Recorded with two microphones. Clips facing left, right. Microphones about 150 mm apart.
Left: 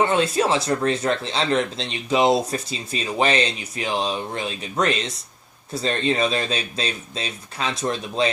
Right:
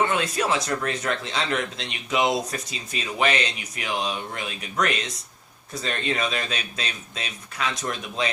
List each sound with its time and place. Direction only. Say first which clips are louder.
0.0 s speech: left 4 dB; 30° left (ahead or behind)